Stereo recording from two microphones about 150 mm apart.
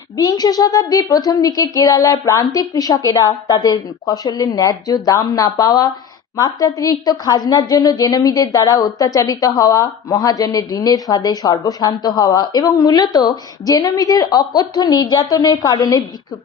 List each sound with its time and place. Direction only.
0.2 s a woman's voice: 25° left (ahead or behind)